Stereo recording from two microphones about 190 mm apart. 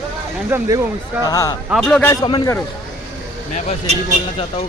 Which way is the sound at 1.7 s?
Centre (ahead or behind).